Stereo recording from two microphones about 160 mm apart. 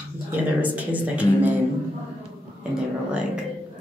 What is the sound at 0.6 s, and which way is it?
Speech, 10° right (ahead or behind).